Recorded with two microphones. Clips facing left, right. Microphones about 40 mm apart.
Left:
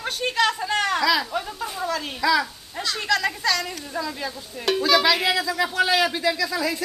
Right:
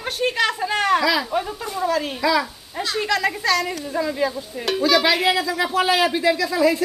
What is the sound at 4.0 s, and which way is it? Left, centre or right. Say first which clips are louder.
Speech: right 7 dB; centre.